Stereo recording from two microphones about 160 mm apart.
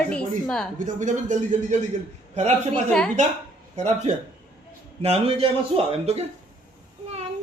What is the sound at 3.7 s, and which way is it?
A man's voice, 45° right (ahead or behind).